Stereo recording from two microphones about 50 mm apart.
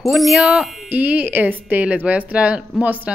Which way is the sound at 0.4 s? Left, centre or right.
Centre.